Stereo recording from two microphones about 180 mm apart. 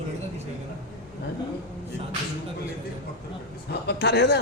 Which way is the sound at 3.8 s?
65° left (ahead or behind).